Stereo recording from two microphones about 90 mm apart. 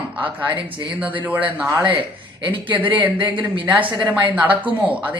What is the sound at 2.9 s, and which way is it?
Speech, 20° right (ahead or behind).